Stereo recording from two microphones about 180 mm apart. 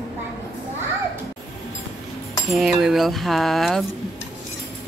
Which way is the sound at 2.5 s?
Centre (ahead or behind).